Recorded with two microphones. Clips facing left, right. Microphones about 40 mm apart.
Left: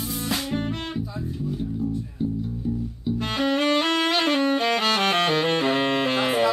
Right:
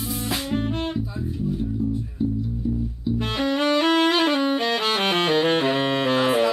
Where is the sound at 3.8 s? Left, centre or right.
Right.